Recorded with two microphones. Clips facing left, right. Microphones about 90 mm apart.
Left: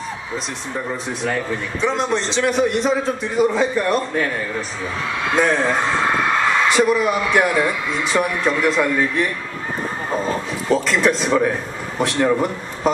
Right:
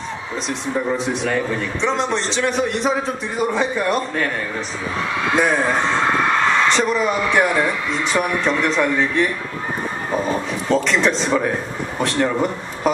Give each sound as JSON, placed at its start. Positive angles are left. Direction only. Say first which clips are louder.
{"t": 1.2, "sound": "a man's voice", "louder": "right 2 dB", "side_deg": 5}
{"t": 5.3, "sound": "speech", "louder": "left 1 dB", "side_deg": -10}
{"t": 6.7, "sound": "a man's voice", "louder": "left 2 dB", "side_deg": 5}
{"t": 10.7, "sound": "a man's voice", "louder": "left 1 dB", "side_deg": 5}